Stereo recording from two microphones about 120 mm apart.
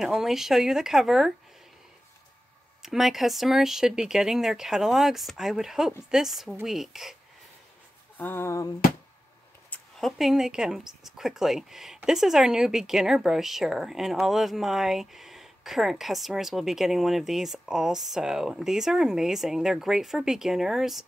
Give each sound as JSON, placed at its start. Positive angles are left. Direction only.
{"t": 0.0, "sound": "speech", "side_deg": -5}
{"t": 2.8, "sound": "speech", "side_deg": -5}
{"t": 8.2, "sound": "a sound", "side_deg": 20}
{"t": 9.9, "sound": "speech", "side_deg": 0}